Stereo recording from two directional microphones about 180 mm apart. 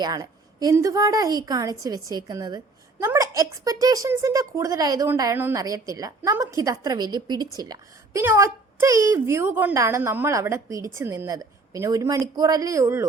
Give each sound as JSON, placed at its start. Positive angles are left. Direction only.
{"t": 0.0, "sound": "a woman's voice", "side_deg": -20}